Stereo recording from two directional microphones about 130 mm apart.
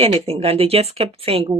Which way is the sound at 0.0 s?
45° right (ahead or behind).